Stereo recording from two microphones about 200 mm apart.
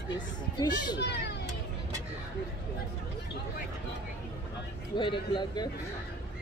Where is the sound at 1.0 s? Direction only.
55° left (ahead or behind).